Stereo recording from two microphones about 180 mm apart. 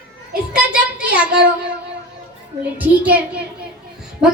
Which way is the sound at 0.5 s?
5° right (ahead or behind).